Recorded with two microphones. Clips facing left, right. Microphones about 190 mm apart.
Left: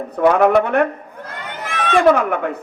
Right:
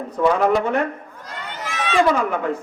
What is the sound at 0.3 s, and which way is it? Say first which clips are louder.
A man's voice: left 4 dB; 60° left (ahead or behind).